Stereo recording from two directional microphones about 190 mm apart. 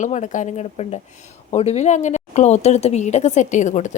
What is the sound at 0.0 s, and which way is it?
A woman's voice, 40° left (ahead or behind).